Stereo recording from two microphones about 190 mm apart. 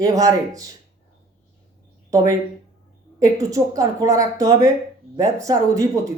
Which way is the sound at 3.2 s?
15° right (ahead or behind).